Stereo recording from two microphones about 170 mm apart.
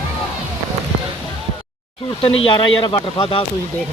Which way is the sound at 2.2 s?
30° left (ahead or behind).